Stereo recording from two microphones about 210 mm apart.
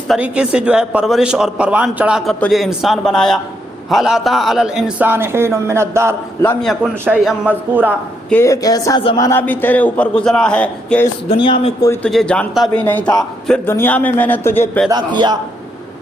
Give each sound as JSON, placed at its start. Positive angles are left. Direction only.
{"t": 0.1, "sound": "a man's voice", "side_deg": -5}
{"t": 6.4, "sound": "a man's voice", "side_deg": 5}
{"t": 8.3, "sound": "a man's voice", "side_deg": 15}
{"t": 11.3, "sound": "speech", "side_deg": 25}
{"t": 11.9, "sound": "a man's voice", "side_deg": 5}
{"t": 14.8, "sound": "a man's voice", "side_deg": -20}